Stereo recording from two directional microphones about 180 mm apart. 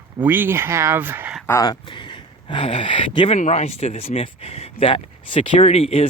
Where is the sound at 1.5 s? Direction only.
20° left (ahead or behind).